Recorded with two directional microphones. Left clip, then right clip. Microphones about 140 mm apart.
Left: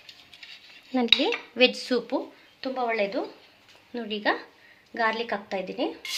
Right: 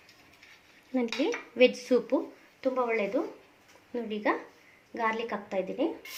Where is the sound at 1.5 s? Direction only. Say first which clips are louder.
Even; 35° left (ahead or behind).